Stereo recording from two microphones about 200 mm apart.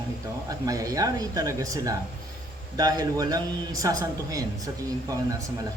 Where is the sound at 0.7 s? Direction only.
15° right (ahead or behind).